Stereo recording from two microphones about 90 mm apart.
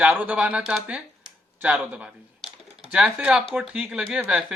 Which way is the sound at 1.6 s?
15° right (ahead or behind).